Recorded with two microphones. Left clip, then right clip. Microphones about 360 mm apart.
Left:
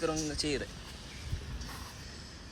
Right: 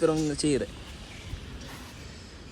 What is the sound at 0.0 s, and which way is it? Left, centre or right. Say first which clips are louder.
Speech: right 8 dB; right.